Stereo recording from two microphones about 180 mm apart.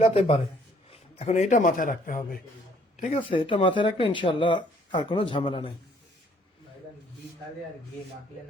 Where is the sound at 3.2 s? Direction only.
30° left (ahead or behind).